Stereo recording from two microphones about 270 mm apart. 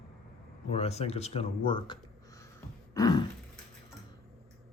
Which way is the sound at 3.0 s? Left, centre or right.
Centre.